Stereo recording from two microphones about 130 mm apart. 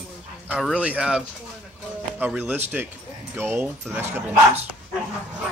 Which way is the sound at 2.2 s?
10° right (ahead or behind).